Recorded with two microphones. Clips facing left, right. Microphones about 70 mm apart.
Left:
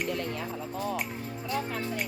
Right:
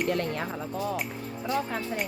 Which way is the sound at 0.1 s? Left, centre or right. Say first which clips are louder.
Right 4 dB; right.